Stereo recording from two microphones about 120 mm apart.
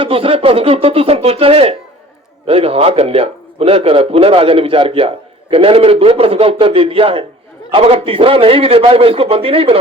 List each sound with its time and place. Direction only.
0.0 s a man's voice: 50° right (ahead or behind)